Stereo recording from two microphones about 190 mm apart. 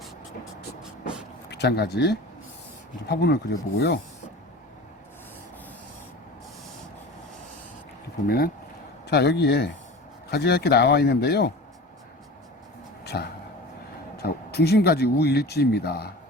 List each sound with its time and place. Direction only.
1.5 s speech: 60° left (ahead or behind)
9.0 s speech: 60° left (ahead or behind)
13.1 s speech: 60° left (ahead or behind)